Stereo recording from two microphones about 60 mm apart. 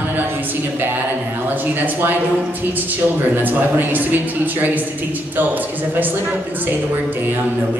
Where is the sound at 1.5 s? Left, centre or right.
Right.